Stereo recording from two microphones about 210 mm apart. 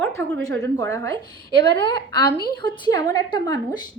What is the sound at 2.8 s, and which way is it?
Speech, 15° left (ahead or behind).